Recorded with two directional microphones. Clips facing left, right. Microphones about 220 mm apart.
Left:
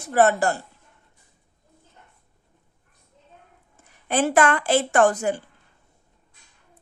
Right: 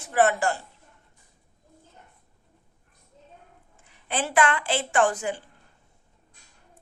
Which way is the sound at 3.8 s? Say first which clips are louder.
Left 7 dB; 45° left (ahead or behind).